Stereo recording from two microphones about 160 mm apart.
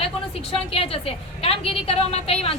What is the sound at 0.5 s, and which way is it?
A woman's voice, 35° left (ahead or behind).